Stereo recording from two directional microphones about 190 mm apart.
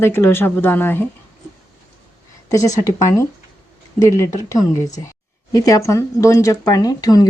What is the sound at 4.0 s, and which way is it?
Speech, 15° left (ahead or behind).